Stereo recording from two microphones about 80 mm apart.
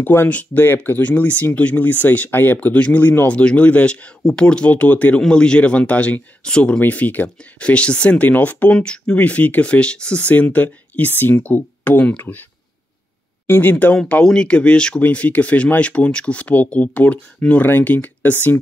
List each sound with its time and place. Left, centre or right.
0.0 s speech: left
13.5 s speech: left
13.9 s speech: centre